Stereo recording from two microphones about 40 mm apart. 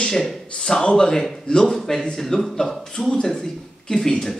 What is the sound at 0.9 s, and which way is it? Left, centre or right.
A man's voice, centre.